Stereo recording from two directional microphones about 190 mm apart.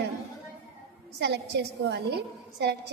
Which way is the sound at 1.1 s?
60° right (ahead or behind).